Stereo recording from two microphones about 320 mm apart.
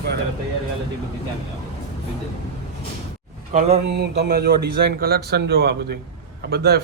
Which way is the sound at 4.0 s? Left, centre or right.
Right.